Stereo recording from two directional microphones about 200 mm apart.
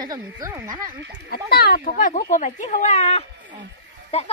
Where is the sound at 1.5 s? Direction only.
50° left (ahead or behind).